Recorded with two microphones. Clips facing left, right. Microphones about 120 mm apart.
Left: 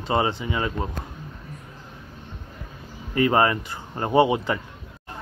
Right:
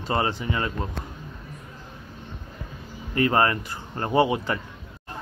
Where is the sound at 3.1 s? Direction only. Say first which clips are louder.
Left 2 dB; 25° left (ahead or behind).